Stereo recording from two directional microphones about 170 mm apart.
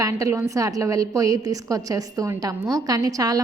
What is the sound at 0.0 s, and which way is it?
A woman's voice, 20° right (ahead or behind).